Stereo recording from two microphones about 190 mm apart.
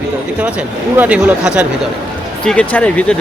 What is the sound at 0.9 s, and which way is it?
Speech, 10° right (ahead or behind).